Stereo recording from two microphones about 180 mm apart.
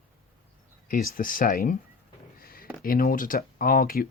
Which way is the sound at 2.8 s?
50° left (ahead or behind).